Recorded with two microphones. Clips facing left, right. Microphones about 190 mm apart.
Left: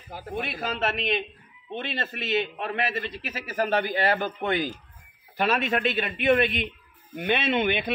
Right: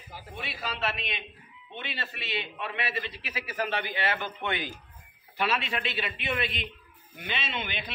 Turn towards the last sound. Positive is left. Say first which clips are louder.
# left 11 dB
turn(degrees=55)  # may be behind; listen again after turning